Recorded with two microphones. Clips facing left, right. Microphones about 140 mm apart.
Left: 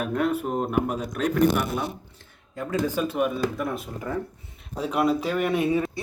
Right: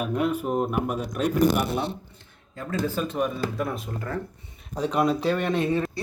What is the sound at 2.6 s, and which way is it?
Speech, 15° left (ahead or behind).